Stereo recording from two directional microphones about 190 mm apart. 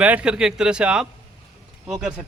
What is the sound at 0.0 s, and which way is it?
Speech, 5° right (ahead or behind).